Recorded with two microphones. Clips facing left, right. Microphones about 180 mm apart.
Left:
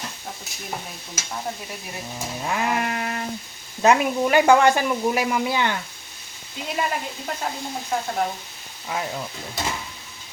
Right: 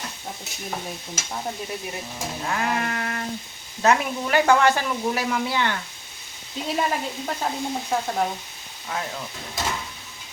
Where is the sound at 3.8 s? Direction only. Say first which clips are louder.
Left 3 dB; 15° left (ahead or behind).